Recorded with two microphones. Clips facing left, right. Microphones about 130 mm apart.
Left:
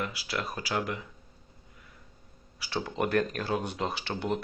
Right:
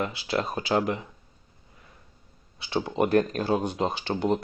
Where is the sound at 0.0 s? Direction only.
25° right (ahead or behind).